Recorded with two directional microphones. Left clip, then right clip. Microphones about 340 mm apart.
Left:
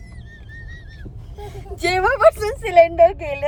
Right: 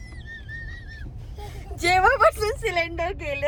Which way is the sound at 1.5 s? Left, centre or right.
Centre.